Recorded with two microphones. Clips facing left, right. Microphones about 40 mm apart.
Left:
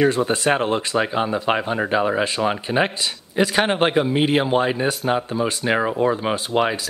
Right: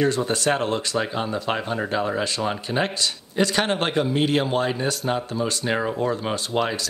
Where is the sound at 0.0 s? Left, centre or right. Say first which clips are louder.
Left 3 dB; centre.